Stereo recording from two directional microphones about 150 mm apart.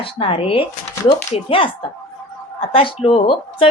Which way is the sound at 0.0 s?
35° left (ahead or behind).